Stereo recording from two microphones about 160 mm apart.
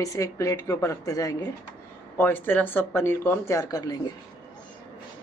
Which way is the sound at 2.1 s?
10° left (ahead or behind).